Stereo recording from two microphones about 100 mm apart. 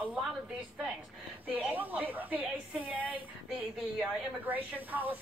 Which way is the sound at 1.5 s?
15° right (ahead or behind).